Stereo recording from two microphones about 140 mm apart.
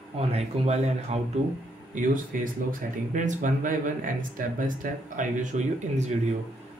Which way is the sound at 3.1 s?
65° right (ahead or behind).